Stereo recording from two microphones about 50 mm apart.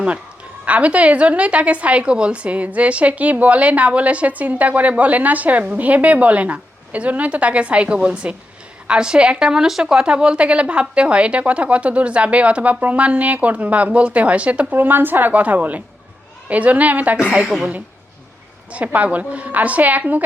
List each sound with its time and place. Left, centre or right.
0.6 s a woman's voice: right
14.8 s a woman's voice: right
18.9 s a woman's voice: right